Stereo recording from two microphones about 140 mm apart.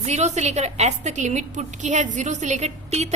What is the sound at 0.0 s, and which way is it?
A woman's voice, 55° right (ahead or behind).